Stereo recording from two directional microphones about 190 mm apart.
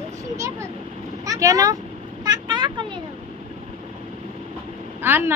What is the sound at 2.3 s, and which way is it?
Vehicle, 20° right (ahead or behind).